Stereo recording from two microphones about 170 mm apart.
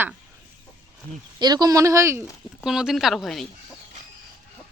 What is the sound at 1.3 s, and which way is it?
Speech, 25° right (ahead or behind).